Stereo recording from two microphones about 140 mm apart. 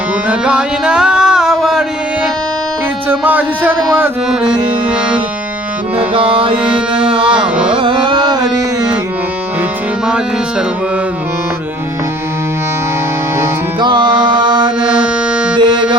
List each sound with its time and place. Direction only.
0.3 s music: 5° right (ahead or behind)
3.1 s speech: 10° right (ahead or behind)
4.5 s music: 10° right (ahead or behind)
6.0 s music: 40° right (ahead or behind)
7.4 s carnatic music: 10° right (ahead or behind)
7.7 s carnatic music: 35° right (ahead or behind)
13.7 s music: 30° right (ahead or behind)
14.8 s music: 5° right (ahead or behind)
15.5 s music: 35° right (ahead or behind)